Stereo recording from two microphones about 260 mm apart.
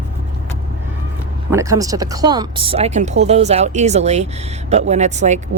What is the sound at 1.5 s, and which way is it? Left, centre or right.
Speech, centre.